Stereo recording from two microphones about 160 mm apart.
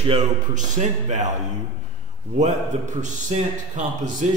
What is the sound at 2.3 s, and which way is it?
A man's voice, 50° right (ahead or behind).